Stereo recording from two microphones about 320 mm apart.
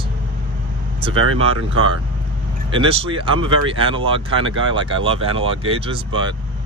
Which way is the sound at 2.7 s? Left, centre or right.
Centre.